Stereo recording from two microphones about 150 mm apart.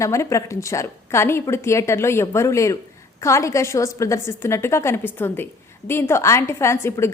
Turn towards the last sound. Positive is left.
turn(degrees=15)  # may be behind; listen again after turning